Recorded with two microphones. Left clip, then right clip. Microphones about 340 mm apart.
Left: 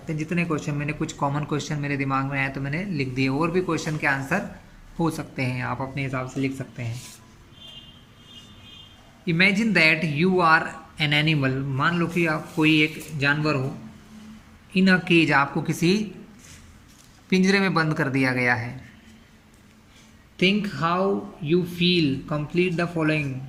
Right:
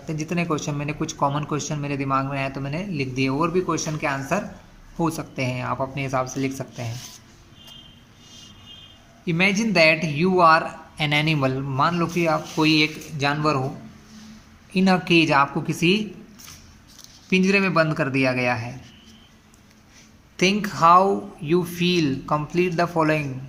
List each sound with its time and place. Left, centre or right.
0.1 s speech: centre
9.2 s speech: centre
14.7 s speech: centre
17.2 s speech: centre
20.3 s speech: centre